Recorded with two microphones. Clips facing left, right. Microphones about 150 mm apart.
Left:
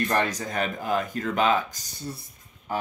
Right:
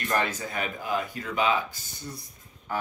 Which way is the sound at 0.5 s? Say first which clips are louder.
Left 3 dB; 45° left (ahead or behind).